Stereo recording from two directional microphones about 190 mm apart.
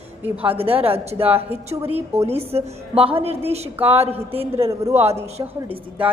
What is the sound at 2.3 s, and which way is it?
A woman's voice, 30° right (ahead or behind).